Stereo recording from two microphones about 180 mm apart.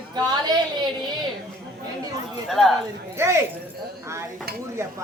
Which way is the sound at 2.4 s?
Centre (ahead or behind).